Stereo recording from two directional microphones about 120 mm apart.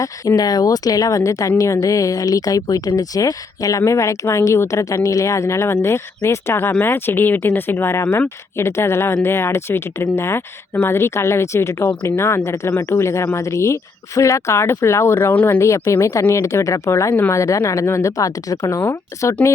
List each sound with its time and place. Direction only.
0.0 s speech: 30° left (ahead or behind)